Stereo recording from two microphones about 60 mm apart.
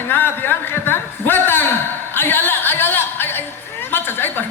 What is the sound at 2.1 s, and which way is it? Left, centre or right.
Music, left.